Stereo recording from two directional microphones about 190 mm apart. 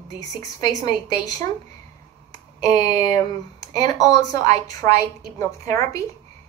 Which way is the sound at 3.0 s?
20° left (ahead or behind).